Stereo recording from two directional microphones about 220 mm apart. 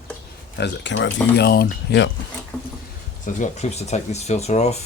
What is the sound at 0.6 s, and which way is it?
Speech, 55° left (ahead or behind).